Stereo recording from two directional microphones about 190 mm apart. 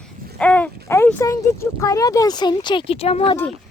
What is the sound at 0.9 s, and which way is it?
Speech, 10° left (ahead or behind).